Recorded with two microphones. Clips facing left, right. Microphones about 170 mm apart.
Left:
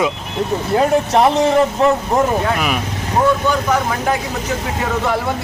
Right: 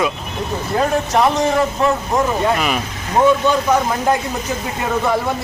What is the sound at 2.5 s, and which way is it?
Speech, 5° left (ahead or behind).